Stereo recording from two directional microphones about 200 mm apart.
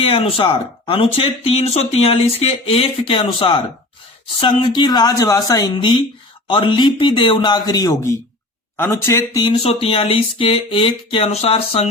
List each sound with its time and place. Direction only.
0.0 s speech: 25° left (ahead or behind)